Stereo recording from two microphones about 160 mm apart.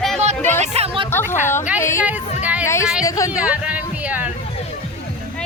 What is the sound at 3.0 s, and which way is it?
Speech, 20° left (ahead or behind).